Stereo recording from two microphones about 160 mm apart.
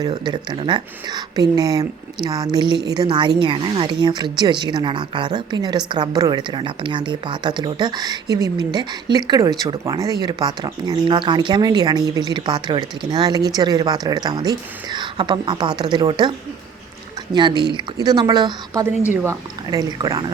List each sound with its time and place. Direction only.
0.0 s a woman's voice: 25° right (ahead or behind)
17.3 s a woman's voice: 30° right (ahead or behind)